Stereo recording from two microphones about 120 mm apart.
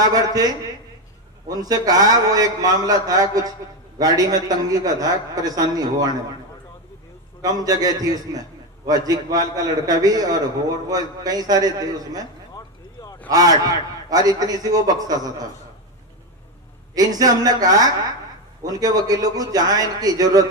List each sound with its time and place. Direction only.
0.0 s a man's voice: 30° right (ahead or behind)
7.4 s a man's voice: 30° right (ahead or behind)
12.5 s a sound: 30° left (ahead or behind)
13.3 s a man's voice: 30° right (ahead or behind)
16.9 s a man's voice: 30° right (ahead or behind)